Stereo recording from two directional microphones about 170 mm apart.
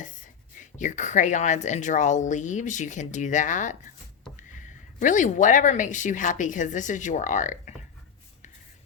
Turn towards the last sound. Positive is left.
turn(degrees=50)  # may be behind; listen again after turning